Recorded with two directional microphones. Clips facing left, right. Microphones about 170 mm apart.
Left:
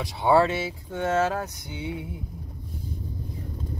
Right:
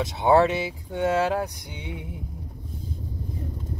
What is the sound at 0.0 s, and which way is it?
Mantra, 20° right (ahead or behind).